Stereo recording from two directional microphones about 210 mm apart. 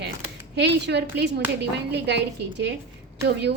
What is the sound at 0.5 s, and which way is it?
Speech, 55° right (ahead or behind).